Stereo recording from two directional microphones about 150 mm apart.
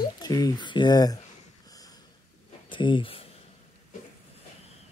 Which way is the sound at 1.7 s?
25° left (ahead or behind).